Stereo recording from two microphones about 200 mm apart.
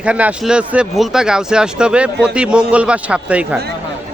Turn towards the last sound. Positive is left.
turn(degrees=-5)  # may be behind; listen again after turning